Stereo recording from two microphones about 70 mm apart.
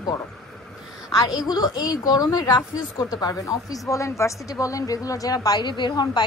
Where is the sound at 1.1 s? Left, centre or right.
Left.